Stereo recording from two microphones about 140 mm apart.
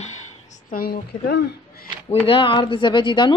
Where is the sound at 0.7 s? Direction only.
90° left.